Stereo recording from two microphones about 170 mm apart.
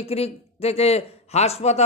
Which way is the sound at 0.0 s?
35° left (ahead or behind).